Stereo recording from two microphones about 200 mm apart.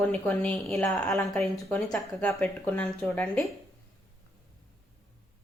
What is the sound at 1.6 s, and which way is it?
Speech, 15° left (ahead or behind).